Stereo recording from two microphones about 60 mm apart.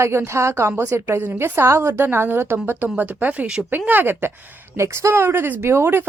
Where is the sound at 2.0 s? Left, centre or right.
Right.